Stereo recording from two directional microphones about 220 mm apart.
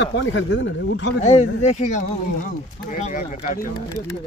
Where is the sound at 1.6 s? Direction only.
30° left (ahead or behind).